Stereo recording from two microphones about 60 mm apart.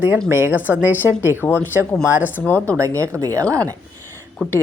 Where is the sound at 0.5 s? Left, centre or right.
Right.